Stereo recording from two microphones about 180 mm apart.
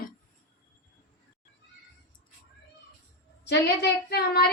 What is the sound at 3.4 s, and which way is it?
A woman's voice, 75° left (ahead or behind).